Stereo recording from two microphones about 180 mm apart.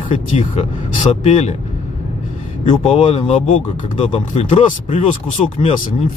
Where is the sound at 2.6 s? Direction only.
30° left (ahead or behind).